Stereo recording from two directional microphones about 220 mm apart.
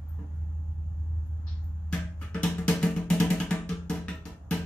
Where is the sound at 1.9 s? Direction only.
5° left (ahead or behind).